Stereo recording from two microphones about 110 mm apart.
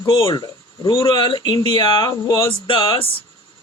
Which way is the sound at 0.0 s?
40° left (ahead or behind).